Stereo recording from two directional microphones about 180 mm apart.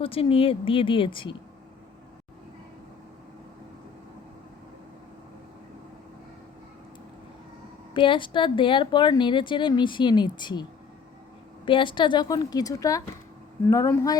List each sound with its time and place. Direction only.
0.0 s speech: 30° left (ahead or behind)
7.9 s speech: 25° left (ahead or behind)